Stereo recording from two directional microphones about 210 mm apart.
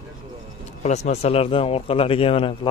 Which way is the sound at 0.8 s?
35° left (ahead or behind).